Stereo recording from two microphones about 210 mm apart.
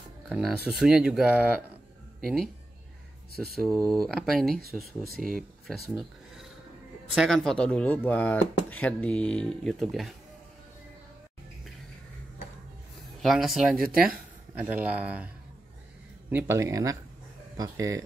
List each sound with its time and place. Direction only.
0.3 s speech: centre (ahead or behind)
3.6 s speech: 5° left (ahead or behind)
5.0 s speech: 45° right (ahead or behind)
5.7 s a sound: centre (ahead or behind)
7.2 s speech: centre (ahead or behind)
13.2 s speech: centre (ahead or behind)
13.7 s speech: 45° right (ahead or behind)
14.1 s speech: 5° right (ahead or behind)